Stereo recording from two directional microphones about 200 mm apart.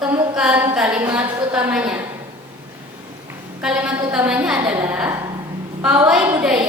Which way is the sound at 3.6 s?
5° right (ahead or behind).